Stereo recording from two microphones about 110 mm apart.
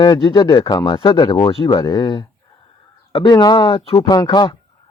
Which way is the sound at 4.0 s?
35° left (ahead or behind).